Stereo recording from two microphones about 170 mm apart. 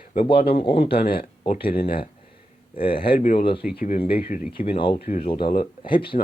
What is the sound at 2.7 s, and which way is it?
Speech, 30° left (ahead or behind).